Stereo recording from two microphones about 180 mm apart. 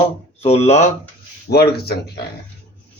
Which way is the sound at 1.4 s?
60° left (ahead or behind).